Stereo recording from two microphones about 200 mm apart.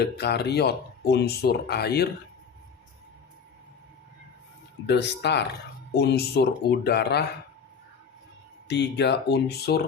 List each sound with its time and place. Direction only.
0.0 s speech: 55° left (ahead or behind)
4.9 s speech: 60° left (ahead or behind)
8.6 s speech: 55° left (ahead or behind)